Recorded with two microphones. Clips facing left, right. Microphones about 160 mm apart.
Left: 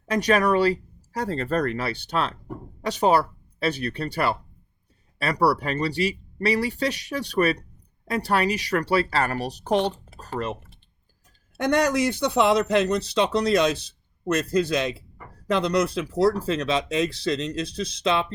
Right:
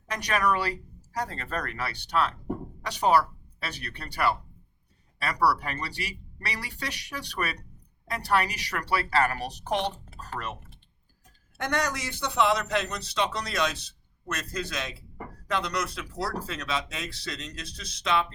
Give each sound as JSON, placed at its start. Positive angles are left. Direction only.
{"t": 0.1, "sound": "speech", "side_deg": 25}
{"t": 12.3, "sound": "speech", "side_deg": 30}